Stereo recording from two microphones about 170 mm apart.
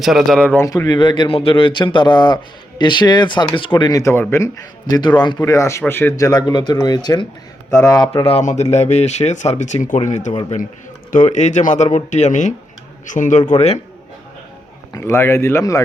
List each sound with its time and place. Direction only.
0.0 s speech: centre (ahead or behind)
8.3 s speech: 40° left (ahead or behind)
14.9 s speech: 15° left (ahead or behind)